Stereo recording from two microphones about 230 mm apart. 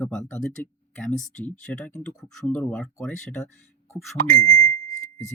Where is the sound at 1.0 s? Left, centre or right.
Left.